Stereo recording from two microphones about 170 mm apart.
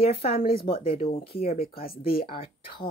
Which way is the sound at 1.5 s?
60° left (ahead or behind).